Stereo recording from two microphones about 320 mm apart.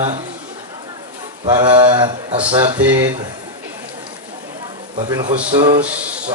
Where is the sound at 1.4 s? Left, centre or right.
Centre.